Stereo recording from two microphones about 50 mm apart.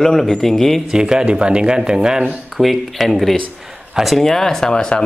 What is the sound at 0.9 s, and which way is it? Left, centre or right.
Speech, centre.